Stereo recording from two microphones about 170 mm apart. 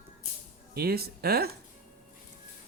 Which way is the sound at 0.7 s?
65° right (ahead or behind).